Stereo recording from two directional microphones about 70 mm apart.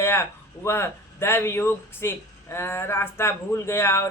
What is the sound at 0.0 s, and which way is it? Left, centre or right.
Speech, left.